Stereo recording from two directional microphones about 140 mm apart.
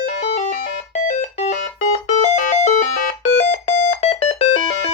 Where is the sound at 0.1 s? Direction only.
50° left (ahead or behind).